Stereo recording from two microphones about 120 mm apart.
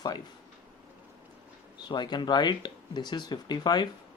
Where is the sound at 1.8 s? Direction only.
40° left (ahead or behind).